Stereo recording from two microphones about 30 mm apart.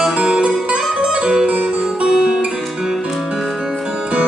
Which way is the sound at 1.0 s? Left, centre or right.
Right.